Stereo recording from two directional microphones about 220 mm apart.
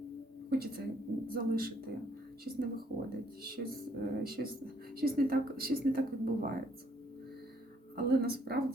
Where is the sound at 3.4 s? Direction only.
45° right (ahead or behind).